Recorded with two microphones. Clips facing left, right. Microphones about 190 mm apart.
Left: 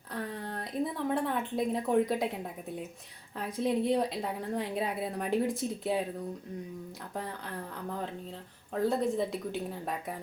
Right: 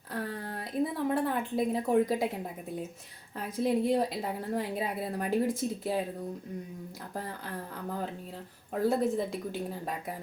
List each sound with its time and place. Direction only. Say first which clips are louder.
0.1 s a sound: right 1 dB; 5° right (ahead or behind)
3.3 s a woman's voice: right 1 dB; centre (ahead or behind)
7.2 s a woman's voice: even; centre (ahead or behind)